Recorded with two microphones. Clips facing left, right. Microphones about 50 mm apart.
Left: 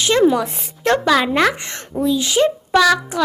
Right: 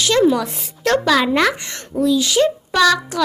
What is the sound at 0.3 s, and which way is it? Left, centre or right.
A child's voice, centre.